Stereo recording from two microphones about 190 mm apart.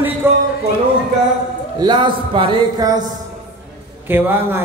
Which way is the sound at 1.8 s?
25° right (ahead or behind).